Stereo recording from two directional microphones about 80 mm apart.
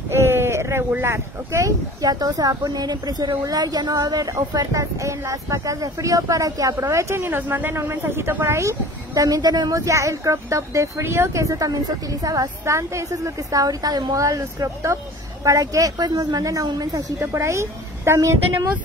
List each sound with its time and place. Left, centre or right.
0.1 s a sound: right
0.9 s speech: right
7.2 s speech: right
17.3 s speech: right